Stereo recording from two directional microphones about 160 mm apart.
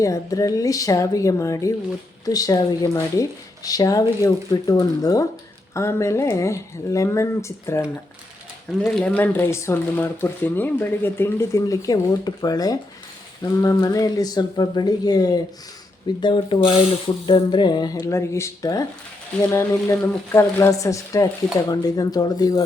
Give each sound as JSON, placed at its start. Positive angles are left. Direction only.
{"t": 0.0, "sound": "speech", "side_deg": 20}
{"t": 8.8, "sound": "speech", "side_deg": 5}